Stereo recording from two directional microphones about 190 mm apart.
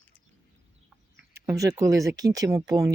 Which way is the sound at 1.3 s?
15° right (ahead or behind).